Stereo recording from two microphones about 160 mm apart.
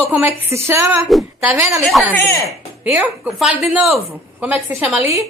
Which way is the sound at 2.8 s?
5° right (ahead or behind).